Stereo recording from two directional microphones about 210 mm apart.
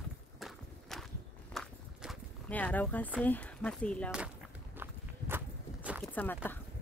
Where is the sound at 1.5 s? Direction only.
Centre (ahead or behind).